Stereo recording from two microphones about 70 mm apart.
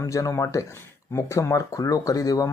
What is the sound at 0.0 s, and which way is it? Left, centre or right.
Speech, left.